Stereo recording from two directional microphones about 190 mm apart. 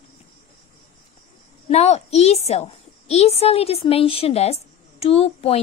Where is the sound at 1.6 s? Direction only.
35° left (ahead or behind).